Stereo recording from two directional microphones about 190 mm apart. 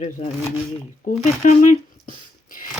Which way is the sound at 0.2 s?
35° left (ahead or behind).